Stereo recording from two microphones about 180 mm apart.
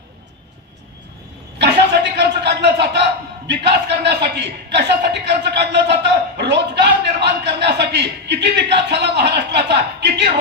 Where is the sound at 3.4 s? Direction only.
70° right (ahead or behind).